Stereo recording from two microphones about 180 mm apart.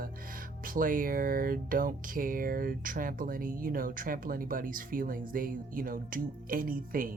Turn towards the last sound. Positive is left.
turn(degrees=-50)  # may be behind; listen again after turning